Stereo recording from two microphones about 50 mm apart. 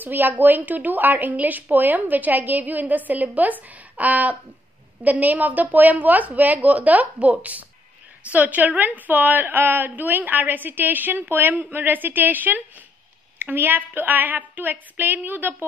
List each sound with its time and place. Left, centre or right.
0.0 s a woman's voice: right